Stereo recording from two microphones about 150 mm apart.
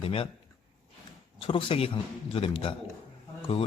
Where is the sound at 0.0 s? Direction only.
40° left (ahead or behind).